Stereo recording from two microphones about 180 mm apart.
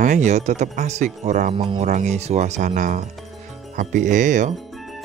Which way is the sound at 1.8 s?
40° right (ahead or behind).